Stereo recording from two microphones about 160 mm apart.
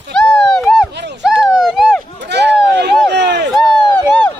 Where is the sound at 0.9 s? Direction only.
90° right.